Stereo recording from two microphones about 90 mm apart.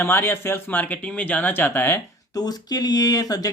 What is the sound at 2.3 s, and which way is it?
Speech, 45° left (ahead or behind).